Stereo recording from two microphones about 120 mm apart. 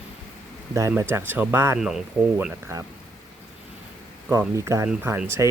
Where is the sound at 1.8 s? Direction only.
5° right (ahead or behind).